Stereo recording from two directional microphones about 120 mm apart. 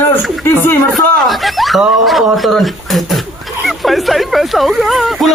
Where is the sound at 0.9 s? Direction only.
Centre (ahead or behind).